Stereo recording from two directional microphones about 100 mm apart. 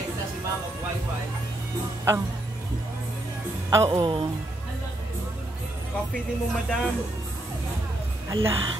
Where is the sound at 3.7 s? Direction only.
35° right (ahead or behind).